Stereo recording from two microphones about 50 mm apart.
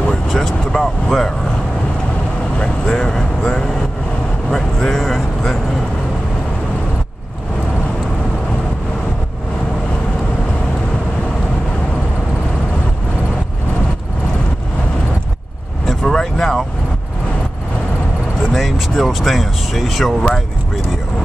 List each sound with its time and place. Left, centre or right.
0.3 s speech: centre
2.6 s vehicle: centre
4.5 s speech: centre
15.9 s vehicle: centre
18.5 s a sound: centre